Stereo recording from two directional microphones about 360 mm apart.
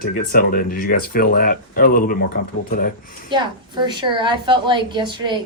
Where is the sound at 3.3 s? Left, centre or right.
Centre.